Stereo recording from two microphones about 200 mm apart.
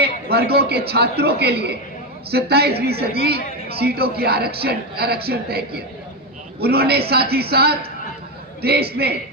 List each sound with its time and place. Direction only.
0.0 s a woman's voice: 50° right (ahead or behind)